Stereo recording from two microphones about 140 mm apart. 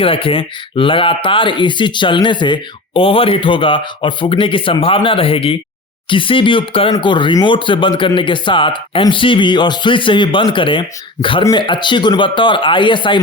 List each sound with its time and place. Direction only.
0.0 s speech: 40° left (ahead or behind)